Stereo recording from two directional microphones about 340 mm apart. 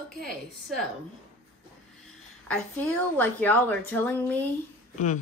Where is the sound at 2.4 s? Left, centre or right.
Centre.